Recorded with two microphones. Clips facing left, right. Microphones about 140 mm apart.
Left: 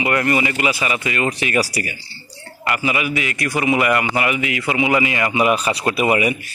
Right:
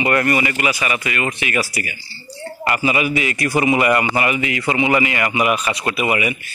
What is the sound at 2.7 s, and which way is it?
Speech, 30° right (ahead or behind).